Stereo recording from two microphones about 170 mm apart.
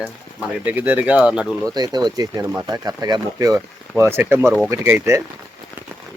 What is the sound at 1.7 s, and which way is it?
Speech, 25° right (ahead or behind).